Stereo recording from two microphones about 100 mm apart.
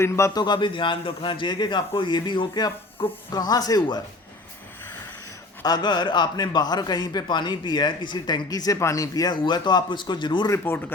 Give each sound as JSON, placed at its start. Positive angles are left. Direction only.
{"t": 0.3, "sound": "a man's voice", "side_deg": 50}
{"t": 5.6, "sound": "a man's voice", "side_deg": 45}
{"t": 10.5, "sound": "speech", "side_deg": 25}